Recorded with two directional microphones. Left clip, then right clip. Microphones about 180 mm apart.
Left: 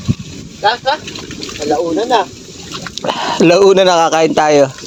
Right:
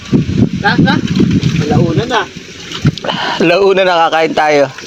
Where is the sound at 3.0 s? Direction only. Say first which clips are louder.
Left 1 dB; 35° left (ahead or behind).